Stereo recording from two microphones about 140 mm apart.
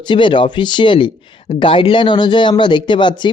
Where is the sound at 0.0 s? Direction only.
35° left (ahead or behind).